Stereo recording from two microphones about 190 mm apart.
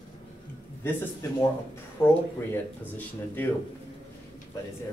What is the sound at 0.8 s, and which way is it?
A man's voice, 15° left (ahead or behind).